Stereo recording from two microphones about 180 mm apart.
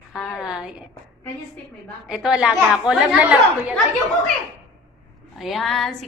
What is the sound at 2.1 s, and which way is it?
A woman's voice, 5° right (ahead or behind).